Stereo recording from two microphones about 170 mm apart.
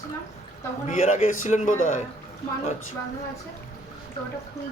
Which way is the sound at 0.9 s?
45° left (ahead or behind).